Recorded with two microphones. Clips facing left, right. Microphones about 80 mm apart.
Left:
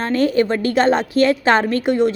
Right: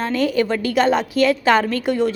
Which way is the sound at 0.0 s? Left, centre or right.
Left.